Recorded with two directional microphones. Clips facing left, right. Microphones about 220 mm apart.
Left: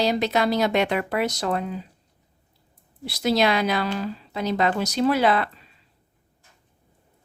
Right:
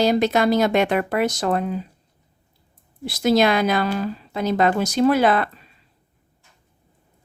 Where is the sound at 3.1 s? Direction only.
50° right (ahead or behind).